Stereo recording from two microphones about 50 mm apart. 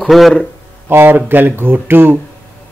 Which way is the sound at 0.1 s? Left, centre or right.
Centre.